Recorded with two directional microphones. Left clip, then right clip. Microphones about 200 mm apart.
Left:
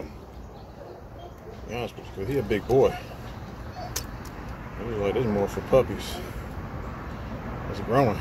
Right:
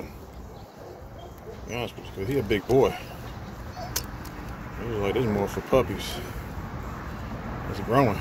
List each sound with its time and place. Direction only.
1.7 s speech: 45° right (ahead or behind)
5.0 s speech: 45° right (ahead or behind)
7.7 s speech: 45° right (ahead or behind)